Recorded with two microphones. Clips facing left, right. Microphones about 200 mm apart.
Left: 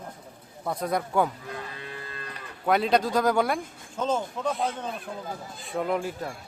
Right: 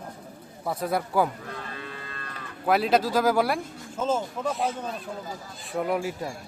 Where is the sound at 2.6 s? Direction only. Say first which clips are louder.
Right 1 dB; 5° right (ahead or behind).